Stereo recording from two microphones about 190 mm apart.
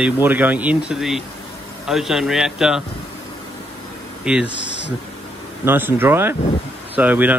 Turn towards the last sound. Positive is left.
turn(degrees=-10)  # may be behind; listen again after turning